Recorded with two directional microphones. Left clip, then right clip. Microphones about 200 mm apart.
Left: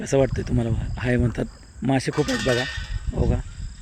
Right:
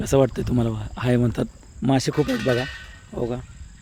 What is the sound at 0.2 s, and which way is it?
Speech, 30° right (ahead or behind).